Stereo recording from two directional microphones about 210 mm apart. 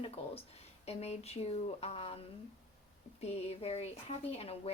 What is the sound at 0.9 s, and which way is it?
A woman's voice, 30° left (ahead or behind).